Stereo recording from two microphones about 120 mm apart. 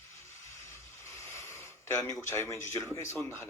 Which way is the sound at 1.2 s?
20° left (ahead or behind).